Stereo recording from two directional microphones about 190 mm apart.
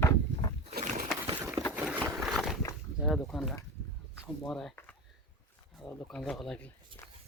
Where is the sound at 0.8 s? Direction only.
40° right (ahead or behind).